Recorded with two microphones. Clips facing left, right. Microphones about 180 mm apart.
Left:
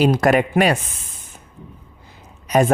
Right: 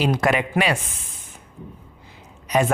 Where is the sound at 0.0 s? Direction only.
40° left (ahead or behind).